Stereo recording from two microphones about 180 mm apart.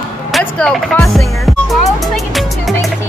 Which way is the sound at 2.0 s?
Centre (ahead or behind).